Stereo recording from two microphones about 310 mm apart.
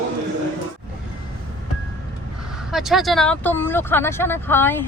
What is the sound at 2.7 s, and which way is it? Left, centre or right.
Speech, centre.